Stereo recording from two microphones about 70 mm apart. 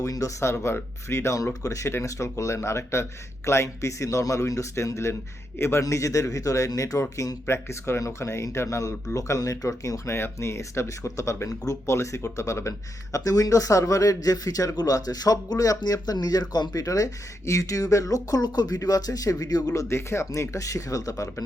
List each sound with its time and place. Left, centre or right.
0.0 s a man's voice: left
5.8 s a man's voice: left
7.4 s a man's voice: left
10.2 s a man's voice: left
19.7 s a man's voice: left